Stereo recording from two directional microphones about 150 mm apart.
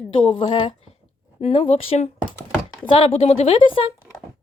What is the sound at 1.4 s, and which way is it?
Speech, 45° left (ahead or behind).